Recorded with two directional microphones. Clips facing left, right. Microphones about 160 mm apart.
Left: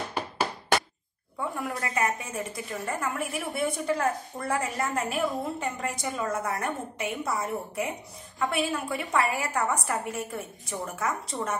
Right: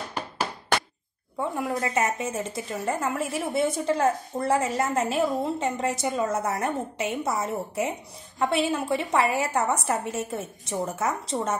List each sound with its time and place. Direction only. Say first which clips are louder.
1.6 s a woman's voice: right 3 dB; 25° right (ahead or behind)